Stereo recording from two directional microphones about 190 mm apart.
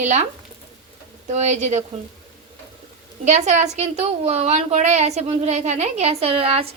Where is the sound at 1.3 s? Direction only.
35° right (ahead or behind).